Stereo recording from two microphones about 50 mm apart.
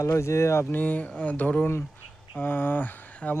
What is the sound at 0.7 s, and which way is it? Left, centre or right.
Speech, left.